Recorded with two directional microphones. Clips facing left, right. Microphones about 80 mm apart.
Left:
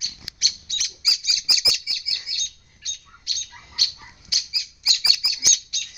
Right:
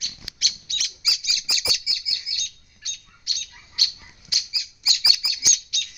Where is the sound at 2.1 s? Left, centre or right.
Left.